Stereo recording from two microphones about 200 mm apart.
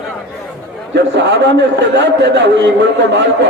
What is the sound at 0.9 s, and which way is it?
A man's voice, 60° right (ahead or behind).